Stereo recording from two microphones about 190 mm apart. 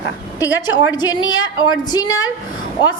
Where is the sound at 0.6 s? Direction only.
20° left (ahead or behind).